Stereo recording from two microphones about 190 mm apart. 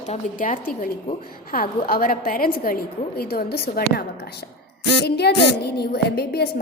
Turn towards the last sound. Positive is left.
turn(degrees=55)  # may be behind; listen again after turning